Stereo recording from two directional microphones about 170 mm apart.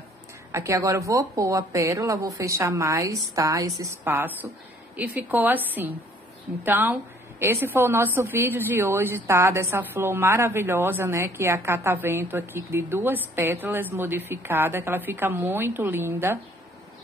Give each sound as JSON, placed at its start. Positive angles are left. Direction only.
{"t": 0.5, "sound": "a woman's voice", "side_deg": -15}